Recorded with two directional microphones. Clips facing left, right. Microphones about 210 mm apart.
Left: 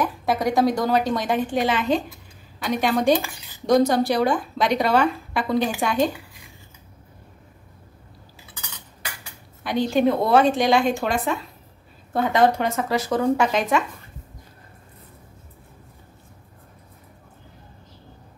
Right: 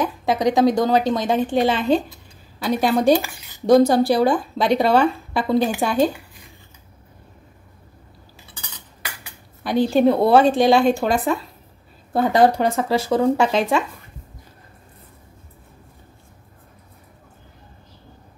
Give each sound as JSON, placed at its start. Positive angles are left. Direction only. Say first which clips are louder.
{"t": 0.0, "sound": "a woman's voice", "louder": "right 3 dB", "side_deg": -20}
{"t": 9.6, "sound": "speech", "louder": "right 4 dB", "side_deg": -35}